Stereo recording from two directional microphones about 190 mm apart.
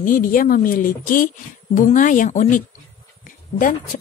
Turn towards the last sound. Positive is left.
turn(degrees=45)  # may be behind; listen again after turning